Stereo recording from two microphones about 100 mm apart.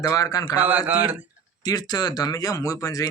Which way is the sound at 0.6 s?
15° right (ahead or behind).